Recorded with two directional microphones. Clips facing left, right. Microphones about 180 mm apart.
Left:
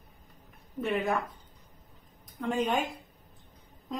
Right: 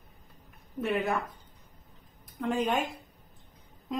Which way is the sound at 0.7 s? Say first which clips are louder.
Even; centre (ahead or behind).